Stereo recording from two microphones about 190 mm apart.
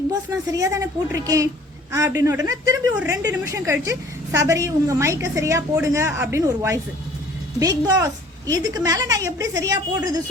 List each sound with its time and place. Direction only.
0.1 s a woman's voice: 20° right (ahead or behind)